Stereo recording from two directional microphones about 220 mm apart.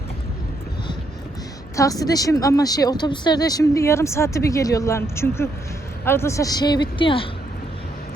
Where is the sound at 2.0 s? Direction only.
15° left (ahead or behind).